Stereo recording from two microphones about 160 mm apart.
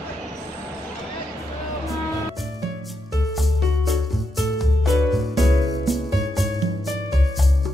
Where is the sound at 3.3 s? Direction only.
Centre (ahead or behind).